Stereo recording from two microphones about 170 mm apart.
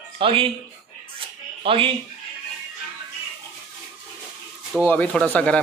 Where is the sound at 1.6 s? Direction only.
30° right (ahead or behind).